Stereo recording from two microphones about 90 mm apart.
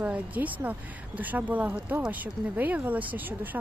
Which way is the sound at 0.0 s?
15° right (ahead or behind).